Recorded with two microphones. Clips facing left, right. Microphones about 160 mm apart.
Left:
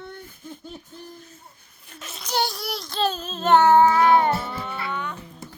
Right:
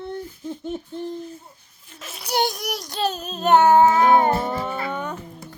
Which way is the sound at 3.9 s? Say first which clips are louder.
Right 2 dB; 40° right (ahead or behind).